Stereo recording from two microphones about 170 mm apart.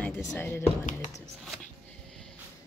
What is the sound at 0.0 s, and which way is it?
Speech, 10° left (ahead or behind).